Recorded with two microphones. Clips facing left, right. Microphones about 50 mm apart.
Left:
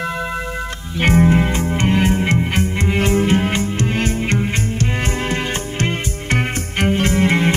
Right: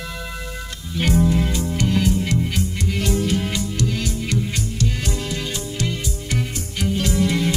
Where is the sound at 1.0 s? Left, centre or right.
Left.